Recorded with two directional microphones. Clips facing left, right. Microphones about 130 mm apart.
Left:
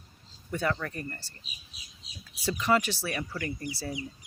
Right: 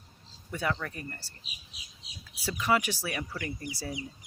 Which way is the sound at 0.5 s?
10° right (ahead or behind).